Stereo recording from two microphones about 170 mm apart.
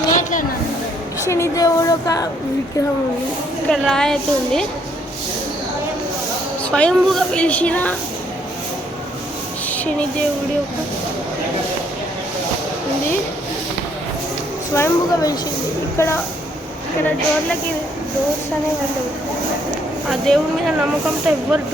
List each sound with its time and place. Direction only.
1.3 s speech: 20° left (ahead or behind)
3.7 s a woman's voice: 5° left (ahead or behind)
6.7 s a woman's voice: 5° left (ahead or behind)
9.6 s a sound: 10° left (ahead or behind)
14.8 s a woman's voice: 20° left (ahead or behind)
20.1 s a woman's voice: 5° left (ahead or behind)